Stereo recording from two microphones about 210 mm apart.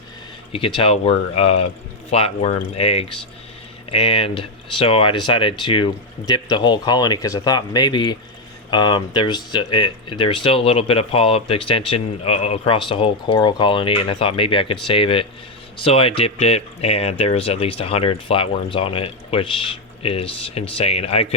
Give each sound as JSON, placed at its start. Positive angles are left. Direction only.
{"t": 0.5, "sound": "speech", "side_deg": 25}